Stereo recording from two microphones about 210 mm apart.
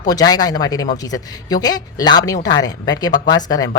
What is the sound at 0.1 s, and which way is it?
A woman's voice, 20° left (ahead or behind).